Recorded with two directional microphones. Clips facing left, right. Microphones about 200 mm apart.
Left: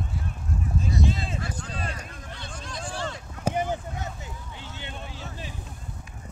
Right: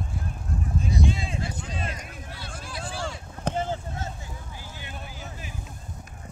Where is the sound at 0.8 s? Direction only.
Centre (ahead or behind).